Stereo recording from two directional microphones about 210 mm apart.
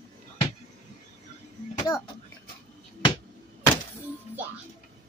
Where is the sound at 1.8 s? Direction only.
15° left (ahead or behind).